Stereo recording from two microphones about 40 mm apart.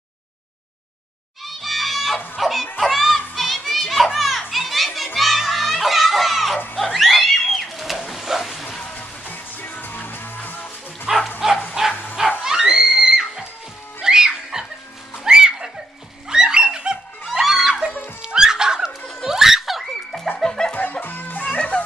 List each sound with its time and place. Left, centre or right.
1.4 s music: centre
3.3 s children playing: centre
6.8 s a sound: centre
8.9 s music: left
11.3 s bow-wow: centre
11.9 s bow-wow: left
12.2 s music: centre
16.3 s a sound: centre
17.2 s a sound: centre
18.2 s music: centre
19.2 s snicker: centre
19.8 s music: centre
20.3 s music: centre
21.0 s music: left